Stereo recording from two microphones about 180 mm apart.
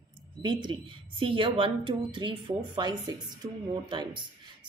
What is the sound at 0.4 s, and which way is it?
A woman's voice, 25° right (ahead or behind).